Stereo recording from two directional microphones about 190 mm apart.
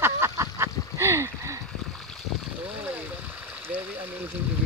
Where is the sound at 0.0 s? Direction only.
15° right (ahead or behind).